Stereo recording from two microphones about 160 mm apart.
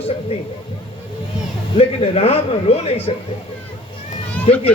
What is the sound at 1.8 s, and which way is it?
A man's voice, 40° left (ahead or behind).